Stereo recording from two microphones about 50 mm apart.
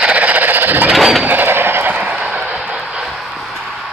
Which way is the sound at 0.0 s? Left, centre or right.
Right.